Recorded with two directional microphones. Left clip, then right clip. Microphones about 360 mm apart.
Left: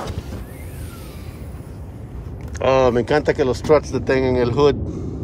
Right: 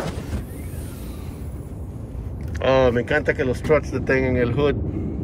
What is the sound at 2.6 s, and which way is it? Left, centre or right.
Speech, centre.